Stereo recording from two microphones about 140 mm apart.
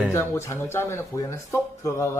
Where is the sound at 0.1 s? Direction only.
20° left (ahead or behind).